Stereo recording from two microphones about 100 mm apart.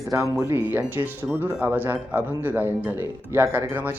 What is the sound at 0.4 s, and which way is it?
Speech, 20° right (ahead or behind).